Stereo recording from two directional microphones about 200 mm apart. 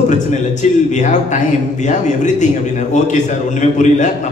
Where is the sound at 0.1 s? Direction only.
35° left (ahead or behind).